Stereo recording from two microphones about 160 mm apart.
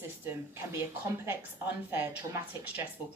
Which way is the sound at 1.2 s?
15° right (ahead or behind).